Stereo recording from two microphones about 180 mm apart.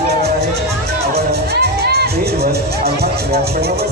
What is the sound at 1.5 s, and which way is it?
Music, 65° right (ahead or behind).